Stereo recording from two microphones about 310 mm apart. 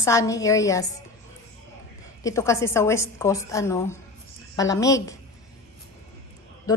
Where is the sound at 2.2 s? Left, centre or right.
Centre.